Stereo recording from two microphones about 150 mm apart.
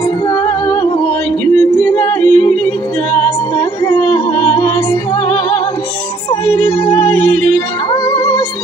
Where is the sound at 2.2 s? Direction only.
5° left (ahead or behind).